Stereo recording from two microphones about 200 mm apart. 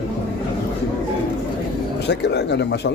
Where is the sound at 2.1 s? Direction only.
60° left (ahead or behind).